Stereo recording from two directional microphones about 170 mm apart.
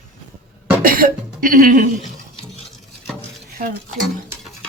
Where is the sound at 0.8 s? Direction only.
55° right (ahead or behind).